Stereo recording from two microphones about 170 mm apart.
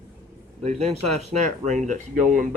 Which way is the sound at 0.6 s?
40° right (ahead or behind).